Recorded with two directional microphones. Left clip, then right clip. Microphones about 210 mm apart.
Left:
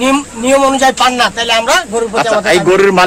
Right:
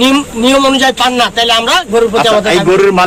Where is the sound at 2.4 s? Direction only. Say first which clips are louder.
Even; 55° left (ahead or behind).